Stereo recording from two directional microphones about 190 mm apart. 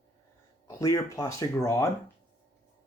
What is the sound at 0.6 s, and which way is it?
Speech, 15° left (ahead or behind).